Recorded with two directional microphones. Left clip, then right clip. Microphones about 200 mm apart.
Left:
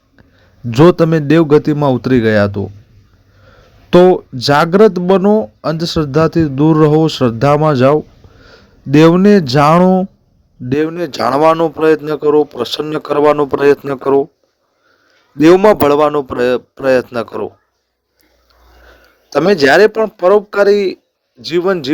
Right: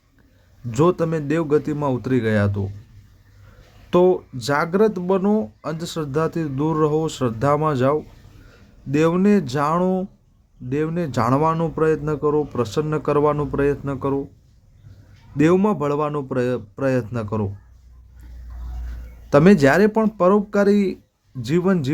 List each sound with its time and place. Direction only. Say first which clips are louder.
0.7 s speech: left 10 dB; 35° left (ahead or behind)
3.8 s speech: left 9 dB; 30° left (ahead or behind); by 14.3 s 45° left (ahead or behind)
15.4 s speech: left 11 dB; 45° left (ahead or behind)
19.3 s speech: left 5 dB; 30° left (ahead or behind)